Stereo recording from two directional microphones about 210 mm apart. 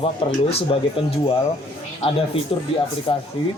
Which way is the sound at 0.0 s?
25° left (ahead or behind).